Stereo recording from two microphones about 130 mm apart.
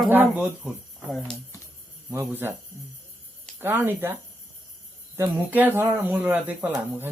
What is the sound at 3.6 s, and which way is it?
Speech, 15° right (ahead or behind).